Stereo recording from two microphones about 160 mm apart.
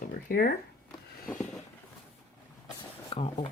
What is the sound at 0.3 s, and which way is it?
Speech, 65° left (ahead or behind).